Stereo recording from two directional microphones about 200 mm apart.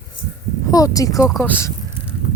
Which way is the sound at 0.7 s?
15° left (ahead or behind).